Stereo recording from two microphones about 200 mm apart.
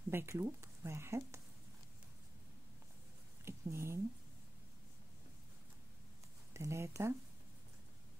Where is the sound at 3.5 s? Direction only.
15° right (ahead or behind).